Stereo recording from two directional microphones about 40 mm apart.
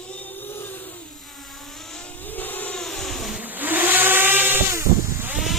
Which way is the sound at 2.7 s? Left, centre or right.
Centre.